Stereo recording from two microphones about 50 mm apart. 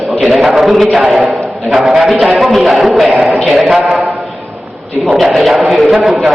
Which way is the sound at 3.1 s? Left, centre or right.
Centre.